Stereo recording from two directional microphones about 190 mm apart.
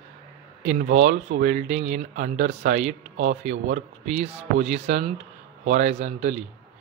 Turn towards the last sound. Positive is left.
turn(degrees=-40)  # may be behind; listen again after turning